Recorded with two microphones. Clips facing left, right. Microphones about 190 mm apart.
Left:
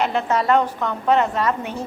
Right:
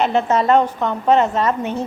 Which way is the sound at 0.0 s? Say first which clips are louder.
Right 4 dB; 25° right (ahead or behind).